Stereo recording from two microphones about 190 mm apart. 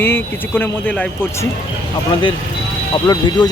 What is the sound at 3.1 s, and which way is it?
Speech, 20° left (ahead or behind).